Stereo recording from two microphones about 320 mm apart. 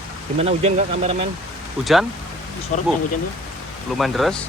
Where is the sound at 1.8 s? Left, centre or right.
Centre.